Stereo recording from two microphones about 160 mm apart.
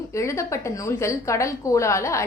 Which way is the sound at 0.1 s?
20° left (ahead or behind).